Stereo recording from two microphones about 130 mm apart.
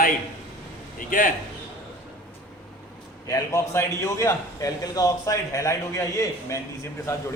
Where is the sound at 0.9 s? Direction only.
90° left.